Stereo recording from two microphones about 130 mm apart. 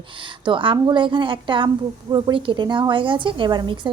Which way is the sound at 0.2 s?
40° right (ahead or behind).